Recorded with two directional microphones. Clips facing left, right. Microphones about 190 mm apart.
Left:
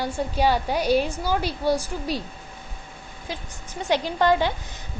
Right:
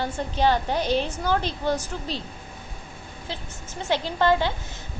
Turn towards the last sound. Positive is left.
turn(degrees=15)  # may be behind; listen again after turning